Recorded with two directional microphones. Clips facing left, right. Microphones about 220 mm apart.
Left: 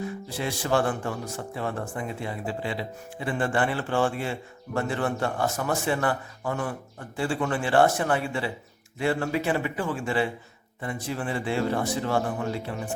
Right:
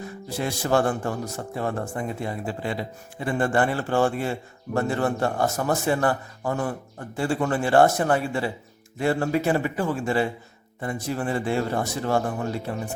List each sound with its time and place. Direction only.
0.3 s a man's voice: 45° right (ahead or behind)